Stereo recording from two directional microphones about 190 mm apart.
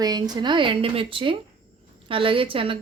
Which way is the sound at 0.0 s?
20° right (ahead or behind).